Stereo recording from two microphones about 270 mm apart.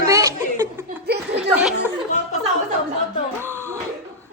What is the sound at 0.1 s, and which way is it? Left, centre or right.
Chuckle, centre.